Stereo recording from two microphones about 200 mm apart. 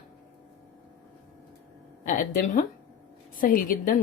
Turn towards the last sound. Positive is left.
turn(degrees=40)  # may be behind; listen again after turning